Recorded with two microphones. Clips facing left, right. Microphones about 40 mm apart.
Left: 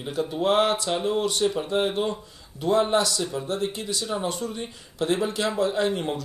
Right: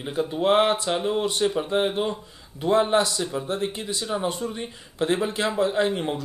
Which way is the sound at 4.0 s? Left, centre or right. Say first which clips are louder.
Right 2 dB; centre.